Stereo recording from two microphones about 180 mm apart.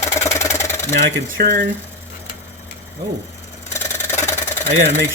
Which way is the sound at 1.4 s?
55° right (ahead or behind).